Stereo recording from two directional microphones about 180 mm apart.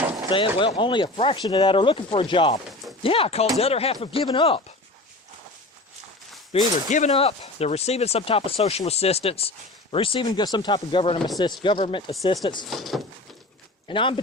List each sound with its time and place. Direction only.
0.3 s speech: 30° left (ahead or behind)
6.5 s speech: 35° left (ahead or behind)
12.6 s speech: centre (ahead or behind)
13.8 s speech: 30° left (ahead or behind)